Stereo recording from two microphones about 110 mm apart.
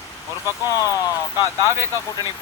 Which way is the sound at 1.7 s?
25° right (ahead or behind).